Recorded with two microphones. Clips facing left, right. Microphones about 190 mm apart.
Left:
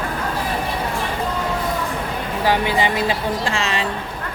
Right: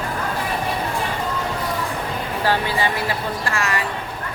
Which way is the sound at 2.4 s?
15° left (ahead or behind).